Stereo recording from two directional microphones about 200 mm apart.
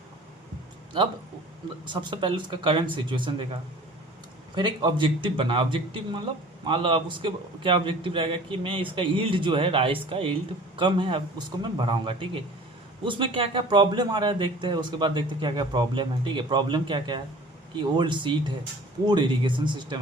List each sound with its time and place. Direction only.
1.8 s speech: 25° right (ahead or behind)
4.5 s speech: 20° right (ahead or behind)